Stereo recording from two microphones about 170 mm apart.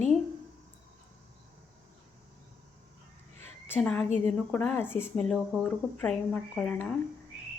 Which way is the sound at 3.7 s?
5° left (ahead or behind).